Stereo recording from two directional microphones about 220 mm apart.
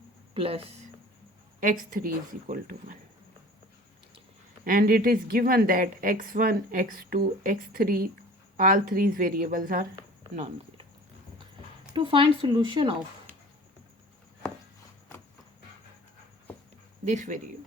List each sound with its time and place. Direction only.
0.3 s speech: 25° right (ahead or behind)
2.5 s a woman's voice: 40° right (ahead or behind)
4.6 s a woman's voice: 40° right (ahead or behind)
10.3 s speech: 30° right (ahead or behind)
11.9 s speech: 25° right (ahead or behind)
17.1 s a woman's voice: 35° right (ahead or behind)